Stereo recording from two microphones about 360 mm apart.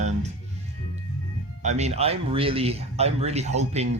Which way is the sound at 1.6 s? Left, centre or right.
Centre.